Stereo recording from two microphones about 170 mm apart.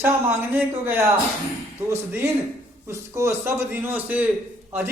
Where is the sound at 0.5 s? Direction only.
10° right (ahead or behind).